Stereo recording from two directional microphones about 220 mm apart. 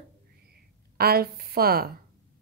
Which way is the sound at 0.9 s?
45° right (ahead or behind).